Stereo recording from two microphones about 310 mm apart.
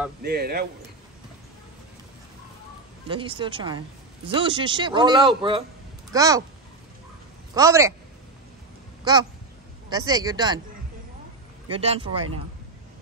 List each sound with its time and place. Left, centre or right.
0.2 s speech: right
3.1 s speech: centre
7.5 s speech: centre
9.1 s speech: centre
11.7 s speech: centre